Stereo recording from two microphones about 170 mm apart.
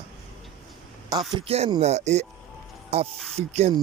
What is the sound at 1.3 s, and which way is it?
A man's voice, 30° right (ahead or behind).